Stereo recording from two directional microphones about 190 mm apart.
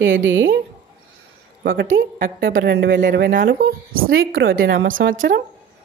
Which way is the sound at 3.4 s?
85° right.